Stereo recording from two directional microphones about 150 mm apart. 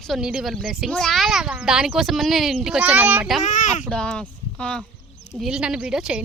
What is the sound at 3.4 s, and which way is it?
Speech, 55° left (ahead or behind).